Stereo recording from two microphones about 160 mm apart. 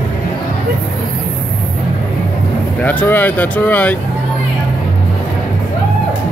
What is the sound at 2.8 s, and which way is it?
Speech, 10° left (ahead or behind).